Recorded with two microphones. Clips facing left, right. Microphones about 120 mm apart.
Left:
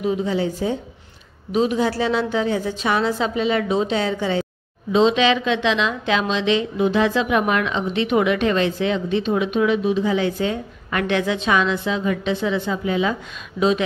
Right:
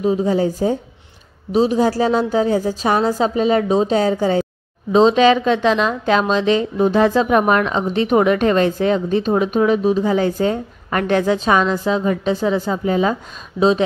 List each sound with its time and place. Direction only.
0.0 s a woman's voice: 40° right (ahead or behind)